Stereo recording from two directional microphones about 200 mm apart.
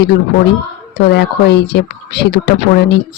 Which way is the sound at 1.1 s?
55° left (ahead or behind).